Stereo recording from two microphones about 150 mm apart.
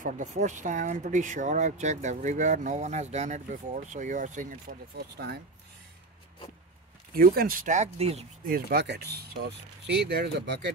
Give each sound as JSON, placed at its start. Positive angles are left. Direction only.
{"t": 0.0, "sound": "speech", "side_deg": -55}
{"t": 7.2, "sound": "speech", "side_deg": -80}
{"t": 8.5, "sound": "speech", "side_deg": -85}